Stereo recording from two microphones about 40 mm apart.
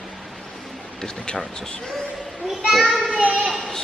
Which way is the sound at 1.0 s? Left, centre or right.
Centre.